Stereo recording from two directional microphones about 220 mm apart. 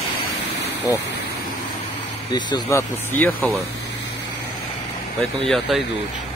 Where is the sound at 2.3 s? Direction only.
15° left (ahead or behind).